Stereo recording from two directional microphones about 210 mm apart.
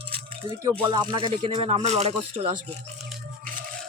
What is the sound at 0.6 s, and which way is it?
Speech, 20° right (ahead or behind).